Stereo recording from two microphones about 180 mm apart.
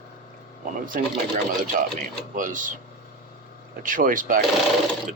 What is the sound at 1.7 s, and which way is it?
Speech, 50° right (ahead or behind).